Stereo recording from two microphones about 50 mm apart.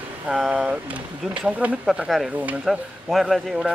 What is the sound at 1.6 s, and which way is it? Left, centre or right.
Speech, right.